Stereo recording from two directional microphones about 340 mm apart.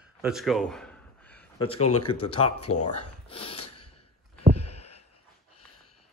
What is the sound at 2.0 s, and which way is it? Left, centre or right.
Speech, centre.